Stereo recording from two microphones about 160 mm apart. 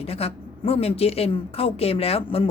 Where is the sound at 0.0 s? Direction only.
40° left (ahead or behind).